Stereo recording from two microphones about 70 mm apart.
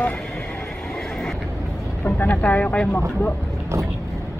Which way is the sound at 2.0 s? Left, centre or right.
Left.